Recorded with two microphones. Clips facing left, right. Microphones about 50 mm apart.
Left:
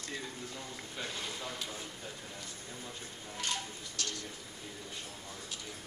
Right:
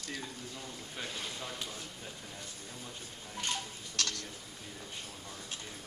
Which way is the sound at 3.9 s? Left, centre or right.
Right.